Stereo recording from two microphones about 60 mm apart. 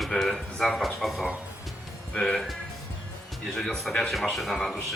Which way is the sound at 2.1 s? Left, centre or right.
Centre.